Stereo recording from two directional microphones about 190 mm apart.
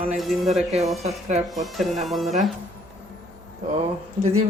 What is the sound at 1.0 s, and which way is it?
Speech, 35° right (ahead or behind).